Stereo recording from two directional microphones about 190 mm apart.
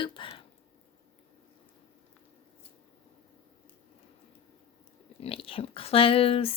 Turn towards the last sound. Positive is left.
turn(degrees=30)  # may be behind; listen again after turning